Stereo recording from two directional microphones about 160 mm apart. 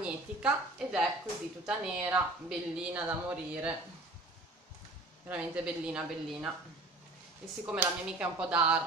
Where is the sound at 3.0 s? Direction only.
10° right (ahead or behind).